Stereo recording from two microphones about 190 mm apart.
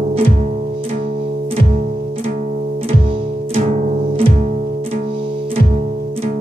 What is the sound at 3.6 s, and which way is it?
Music, 40° right (ahead or behind).